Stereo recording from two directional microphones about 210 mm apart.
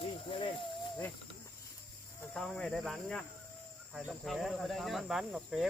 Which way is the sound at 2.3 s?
5° left (ahead or behind).